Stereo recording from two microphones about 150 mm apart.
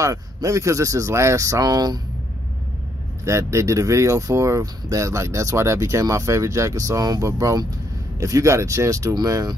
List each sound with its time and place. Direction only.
0.0 s speech: 20° right (ahead or behind)
3.3 s speech: 20° right (ahead or behind)